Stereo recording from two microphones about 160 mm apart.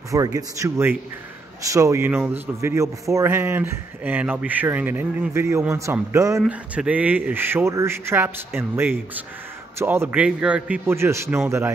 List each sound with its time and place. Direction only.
0.1 s a man's voice: 20° right (ahead or behind)
6.4 s a man's voice: 5° right (ahead or behind)